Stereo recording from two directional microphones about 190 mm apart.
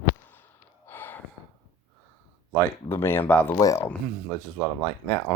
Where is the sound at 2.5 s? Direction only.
10° left (ahead or behind).